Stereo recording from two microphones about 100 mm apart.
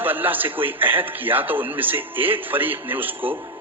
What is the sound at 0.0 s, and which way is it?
Speech, 20° right (ahead or behind).